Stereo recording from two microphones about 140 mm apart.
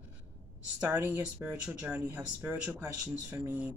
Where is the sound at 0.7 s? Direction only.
15° right (ahead or behind).